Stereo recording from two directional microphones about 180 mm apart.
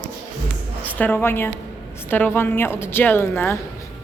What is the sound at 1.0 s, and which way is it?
Speech, 10° left (ahead or behind).